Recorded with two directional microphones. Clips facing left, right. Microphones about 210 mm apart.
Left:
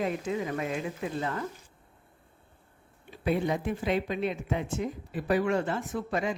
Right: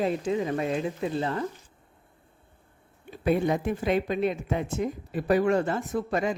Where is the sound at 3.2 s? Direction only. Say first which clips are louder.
Right 4 dB; 50° right (ahead or behind).